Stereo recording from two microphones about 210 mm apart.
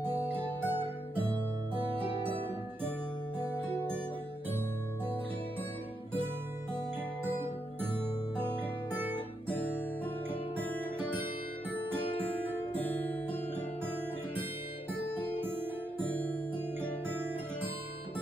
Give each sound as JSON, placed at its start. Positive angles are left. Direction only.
{"t": 0.3, "sound": "music", "side_deg": -10}
{"t": 1.8, "sound": "music", "side_deg": -25}
{"t": 7.2, "sound": "music", "side_deg": -10}
{"t": 8.9, "sound": "guitar", "side_deg": -10}
{"t": 9.5, "sound": "music", "side_deg": 5}